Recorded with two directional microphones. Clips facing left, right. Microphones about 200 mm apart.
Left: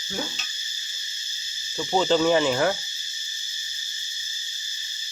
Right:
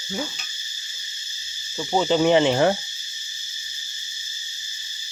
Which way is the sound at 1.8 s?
10° right (ahead or behind).